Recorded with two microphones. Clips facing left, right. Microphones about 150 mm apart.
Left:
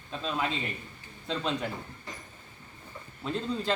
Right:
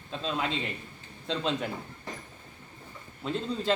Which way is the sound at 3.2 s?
Centre (ahead or behind).